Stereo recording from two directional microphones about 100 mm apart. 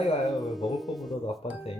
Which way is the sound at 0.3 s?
Centre (ahead or behind).